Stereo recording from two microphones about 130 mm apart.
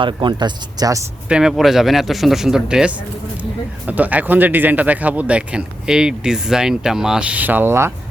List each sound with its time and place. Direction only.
0.0 s speech: 35° right (ahead or behind)
1.3 s speech: 5° right (ahead or behind)